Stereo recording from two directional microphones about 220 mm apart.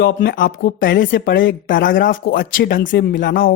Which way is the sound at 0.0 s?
55° left (ahead or behind).